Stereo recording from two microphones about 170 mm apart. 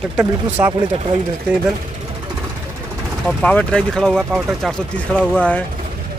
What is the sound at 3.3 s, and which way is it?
Speech, 5° left (ahead or behind).